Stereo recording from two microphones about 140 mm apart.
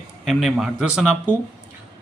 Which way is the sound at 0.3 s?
Centre (ahead or behind).